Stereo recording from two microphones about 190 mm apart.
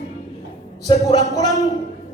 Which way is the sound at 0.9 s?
20° left (ahead or behind).